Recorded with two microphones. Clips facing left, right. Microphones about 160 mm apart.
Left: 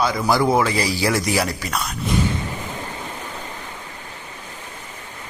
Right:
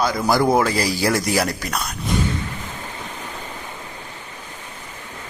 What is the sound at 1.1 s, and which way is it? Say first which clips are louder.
Speech: even; 10° left (ahead or behind).